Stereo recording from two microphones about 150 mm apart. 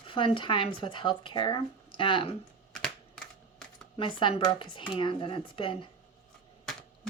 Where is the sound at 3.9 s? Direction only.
35° left (ahead or behind).